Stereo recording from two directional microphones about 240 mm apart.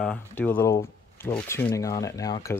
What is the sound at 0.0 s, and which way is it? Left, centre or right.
Speech, centre.